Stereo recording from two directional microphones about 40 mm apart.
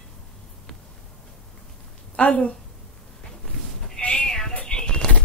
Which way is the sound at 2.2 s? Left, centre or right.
Left.